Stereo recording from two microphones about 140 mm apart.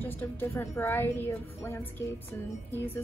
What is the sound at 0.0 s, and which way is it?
Speech, 15° left (ahead or behind).